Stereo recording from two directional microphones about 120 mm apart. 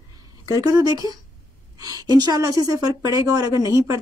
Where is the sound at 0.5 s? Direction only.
30° right (ahead or behind).